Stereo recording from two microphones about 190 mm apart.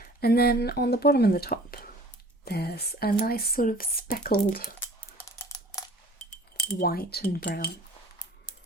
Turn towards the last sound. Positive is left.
turn(degrees=55)  # may be behind; listen again after turning